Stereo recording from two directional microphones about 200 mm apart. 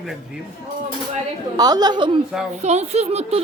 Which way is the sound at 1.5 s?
20° right (ahead or behind).